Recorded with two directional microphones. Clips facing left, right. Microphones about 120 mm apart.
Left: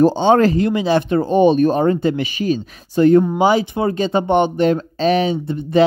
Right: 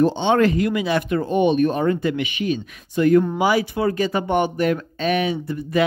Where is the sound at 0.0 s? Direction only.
40° left (ahead or behind).